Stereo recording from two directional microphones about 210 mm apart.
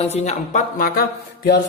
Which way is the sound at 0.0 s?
30° left (ahead or behind).